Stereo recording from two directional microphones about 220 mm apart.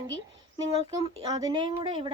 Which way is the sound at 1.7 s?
25° right (ahead or behind).